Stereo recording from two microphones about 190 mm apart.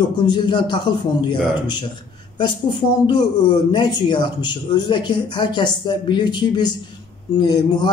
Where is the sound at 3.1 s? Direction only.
20° left (ahead or behind).